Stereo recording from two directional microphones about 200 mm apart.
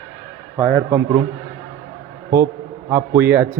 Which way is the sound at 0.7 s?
15° right (ahead or behind).